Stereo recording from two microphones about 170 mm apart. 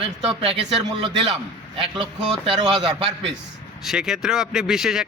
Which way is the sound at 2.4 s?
35° right (ahead or behind).